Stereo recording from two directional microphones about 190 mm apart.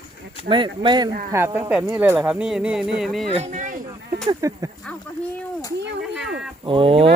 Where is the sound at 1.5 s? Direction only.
10° right (ahead or behind).